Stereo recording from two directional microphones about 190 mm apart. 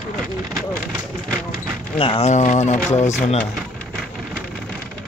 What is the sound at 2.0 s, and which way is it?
Speech, 30° left (ahead or behind).